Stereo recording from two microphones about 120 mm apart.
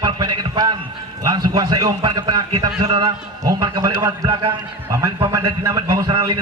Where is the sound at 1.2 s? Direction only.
35° right (ahead or behind).